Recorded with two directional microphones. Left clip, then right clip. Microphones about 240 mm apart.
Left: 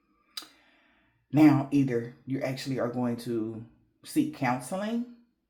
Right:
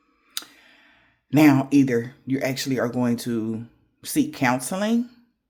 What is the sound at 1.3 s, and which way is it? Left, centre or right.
Speech, right.